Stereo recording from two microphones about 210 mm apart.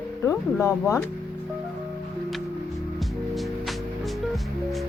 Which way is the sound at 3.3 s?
Centre (ahead or behind).